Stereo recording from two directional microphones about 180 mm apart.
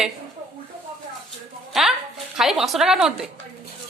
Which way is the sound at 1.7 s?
Centre (ahead or behind).